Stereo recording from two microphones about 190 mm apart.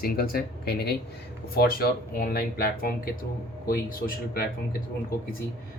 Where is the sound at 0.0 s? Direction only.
50° left (ahead or behind).